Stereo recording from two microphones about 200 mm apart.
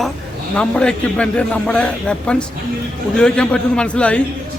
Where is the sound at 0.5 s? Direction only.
5° left (ahead or behind).